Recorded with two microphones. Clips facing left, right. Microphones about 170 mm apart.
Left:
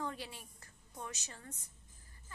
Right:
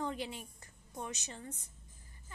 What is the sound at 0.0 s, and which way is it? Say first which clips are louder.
A woman's voice: right 4 dB; 20° right (ahead or behind).